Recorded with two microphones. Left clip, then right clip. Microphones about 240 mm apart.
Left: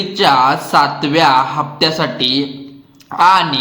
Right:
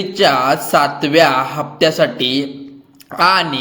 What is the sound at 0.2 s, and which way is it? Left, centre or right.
A man's voice, centre.